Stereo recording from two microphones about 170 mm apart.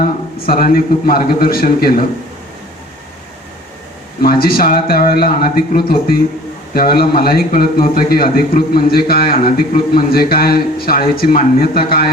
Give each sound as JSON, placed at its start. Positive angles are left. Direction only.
{"t": 0.4, "sound": "a man's voice", "side_deg": 60}
{"t": 4.2, "sound": "a man's voice", "side_deg": 60}